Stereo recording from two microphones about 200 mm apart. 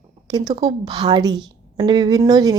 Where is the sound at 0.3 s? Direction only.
20° right (ahead or behind).